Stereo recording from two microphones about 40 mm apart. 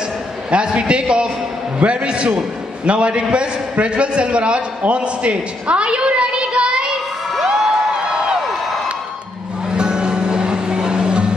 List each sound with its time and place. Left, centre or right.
0.5 s a man's voice: right
7.4 s a sound: centre
9.7 s music: right